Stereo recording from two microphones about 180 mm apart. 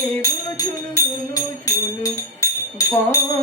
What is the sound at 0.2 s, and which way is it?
Music, 20° left (ahead or behind).